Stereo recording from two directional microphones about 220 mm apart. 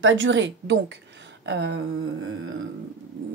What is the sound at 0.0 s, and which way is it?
A woman's voice, 60° right (ahead or behind).